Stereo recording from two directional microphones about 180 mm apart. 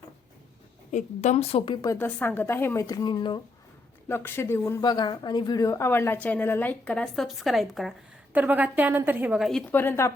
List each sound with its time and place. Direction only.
0.9 s a woman's voice: 40° left (ahead or behind); by 3.4 s 25° left (ahead or behind)
4.1 s a woman's voice: 15° left (ahead or behind)
9.8 s a woman's voice: 15° left (ahead or behind)